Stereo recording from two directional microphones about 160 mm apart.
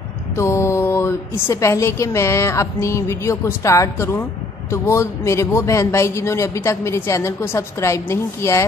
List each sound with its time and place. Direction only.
0.4 s speech: 15° left (ahead or behind)